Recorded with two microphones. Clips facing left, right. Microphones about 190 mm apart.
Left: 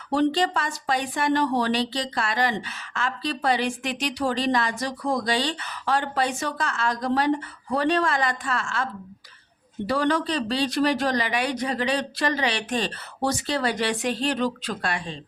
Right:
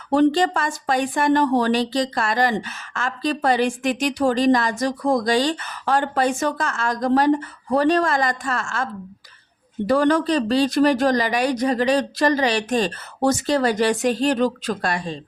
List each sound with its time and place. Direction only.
0.1 s speech: 50° right (ahead or behind)